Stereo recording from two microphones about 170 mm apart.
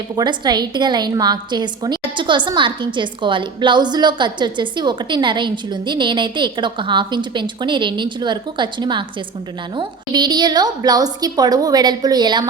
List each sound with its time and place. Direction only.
0.2 s a woman's voice: 25° right (ahead or behind)